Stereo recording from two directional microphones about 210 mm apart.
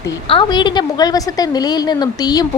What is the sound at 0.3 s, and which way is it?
A woman's voice, 20° left (ahead or behind).